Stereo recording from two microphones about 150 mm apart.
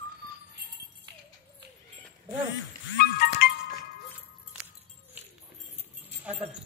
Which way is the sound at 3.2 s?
85° left.